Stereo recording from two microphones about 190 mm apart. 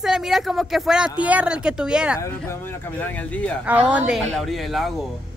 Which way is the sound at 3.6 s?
5° right (ahead or behind).